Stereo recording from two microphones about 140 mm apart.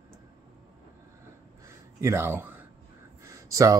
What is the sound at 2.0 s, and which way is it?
Speech, 20° right (ahead or behind).